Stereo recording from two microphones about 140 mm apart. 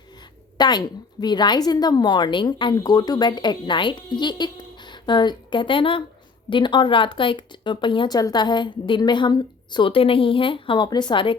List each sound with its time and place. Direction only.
0.5 s a woman's voice: 30° left (ahead or behind)